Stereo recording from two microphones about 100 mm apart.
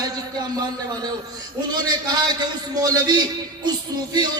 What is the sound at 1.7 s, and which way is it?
A man's voice, 45° right (ahead or behind).